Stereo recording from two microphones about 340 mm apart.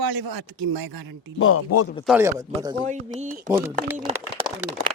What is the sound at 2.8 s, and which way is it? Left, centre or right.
Speech, centre.